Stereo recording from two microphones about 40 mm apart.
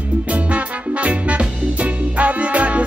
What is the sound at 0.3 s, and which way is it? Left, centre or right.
Music, right.